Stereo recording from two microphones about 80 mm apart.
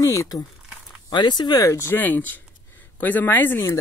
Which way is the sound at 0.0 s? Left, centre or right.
Left.